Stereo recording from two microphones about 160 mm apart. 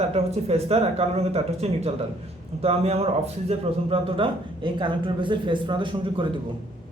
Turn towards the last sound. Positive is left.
turn(degrees=-30)  # may be behind; listen again after turning